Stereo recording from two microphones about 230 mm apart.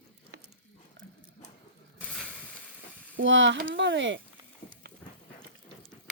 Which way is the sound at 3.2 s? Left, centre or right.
Right.